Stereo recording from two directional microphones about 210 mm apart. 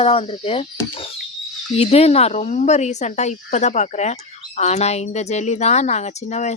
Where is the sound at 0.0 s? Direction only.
30° left (ahead or behind).